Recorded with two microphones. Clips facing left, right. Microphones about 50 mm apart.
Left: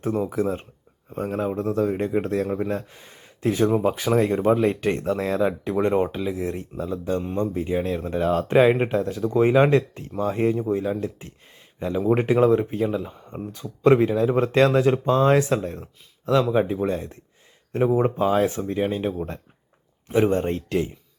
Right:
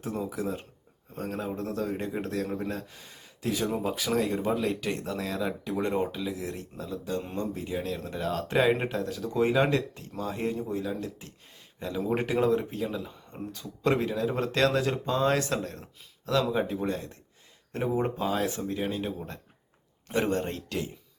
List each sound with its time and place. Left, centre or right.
0.0 s speech: left
1.1 s speech: left
20.1 s speech: centre; by 20.9 s left